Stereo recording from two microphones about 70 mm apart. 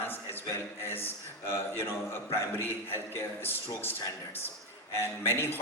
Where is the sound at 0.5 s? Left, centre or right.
Left.